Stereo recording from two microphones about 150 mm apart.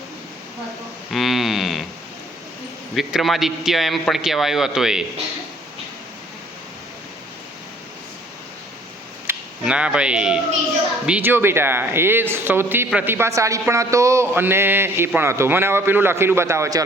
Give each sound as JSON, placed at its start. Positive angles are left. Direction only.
{"t": 1.1, "sound": "a sound", "side_deg": 0}
{"t": 2.9, "sound": "a man's voice", "side_deg": 0}
{"t": 9.2, "sound": "speech", "side_deg": -5}